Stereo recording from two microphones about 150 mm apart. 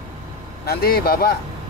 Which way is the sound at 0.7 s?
90° left.